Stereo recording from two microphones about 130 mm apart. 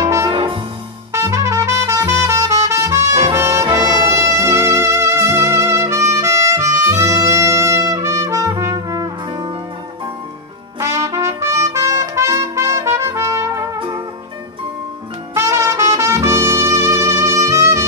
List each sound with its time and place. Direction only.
0.0 s music: 25° right (ahead or behind)
0.3 s music: 35° right (ahead or behind)
1.1 s music: 20° right (ahead or behind)
10.8 s trumpet: 25° right (ahead or behind)
13.7 s music: 25° right (ahead or behind)
15.3 s trumpet: 20° right (ahead or behind)